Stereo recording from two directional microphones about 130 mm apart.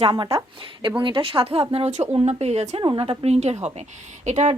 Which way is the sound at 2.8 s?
45° right (ahead or behind).